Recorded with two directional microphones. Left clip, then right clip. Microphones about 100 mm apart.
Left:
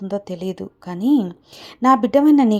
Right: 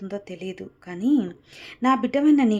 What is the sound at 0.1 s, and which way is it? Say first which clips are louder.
A woman's voice: left 8 dB; 40° left (ahead or behind).